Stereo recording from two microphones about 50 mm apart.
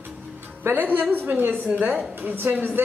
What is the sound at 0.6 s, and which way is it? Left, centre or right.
Speech, right.